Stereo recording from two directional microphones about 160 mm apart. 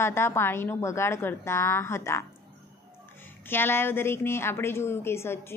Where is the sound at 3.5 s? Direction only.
15° left (ahead or behind).